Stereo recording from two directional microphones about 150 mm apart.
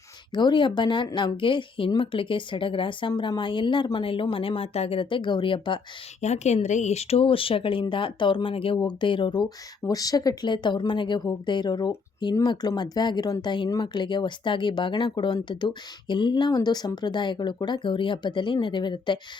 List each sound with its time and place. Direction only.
0.3 s speech: 30° left (ahead or behind)
6.2 s speech: 50° left (ahead or behind); by 19.2 s 30° left (ahead or behind)